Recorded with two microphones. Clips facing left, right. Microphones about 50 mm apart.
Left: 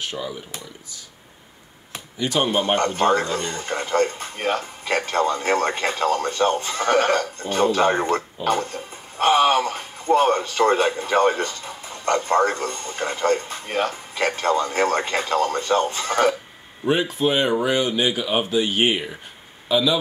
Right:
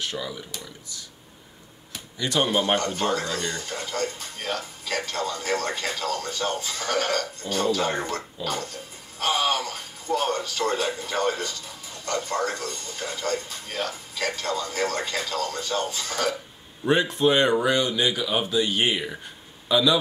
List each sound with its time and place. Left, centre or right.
0.0 s speech: left
2.1 s speech: left
16.8 s speech: centre
19.7 s speech: centre